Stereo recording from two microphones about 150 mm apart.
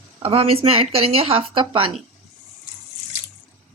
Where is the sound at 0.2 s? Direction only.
40° right (ahead or behind).